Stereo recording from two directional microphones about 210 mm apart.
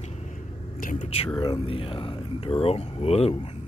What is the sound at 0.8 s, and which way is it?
Speech, 40° left (ahead or behind).